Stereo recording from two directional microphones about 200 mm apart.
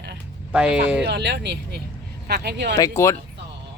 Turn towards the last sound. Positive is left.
turn(degrees=15)  # may be behind; listen again after turning